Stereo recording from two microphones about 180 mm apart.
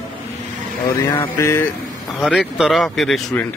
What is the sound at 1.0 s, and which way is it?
Mantra, 20° left (ahead or behind).